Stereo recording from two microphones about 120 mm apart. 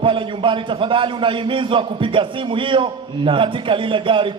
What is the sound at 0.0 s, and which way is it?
A man's voice, 45° right (ahead or behind).